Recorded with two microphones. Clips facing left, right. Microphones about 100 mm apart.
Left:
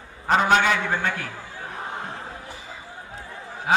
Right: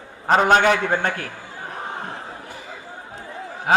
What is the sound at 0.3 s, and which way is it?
Speech, 45° right (ahead or behind).